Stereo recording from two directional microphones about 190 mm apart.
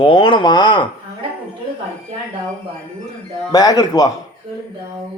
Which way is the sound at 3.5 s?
20° left (ahead or behind).